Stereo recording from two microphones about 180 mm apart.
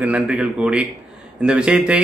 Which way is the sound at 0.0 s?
5° right (ahead or behind).